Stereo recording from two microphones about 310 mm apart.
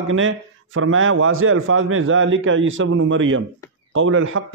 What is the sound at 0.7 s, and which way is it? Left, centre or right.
A man's voice, right.